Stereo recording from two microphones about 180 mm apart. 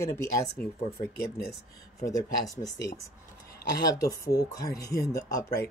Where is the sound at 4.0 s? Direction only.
20° left (ahead or behind).